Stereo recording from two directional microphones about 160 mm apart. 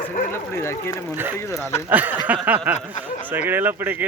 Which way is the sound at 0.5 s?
15° left (ahead or behind).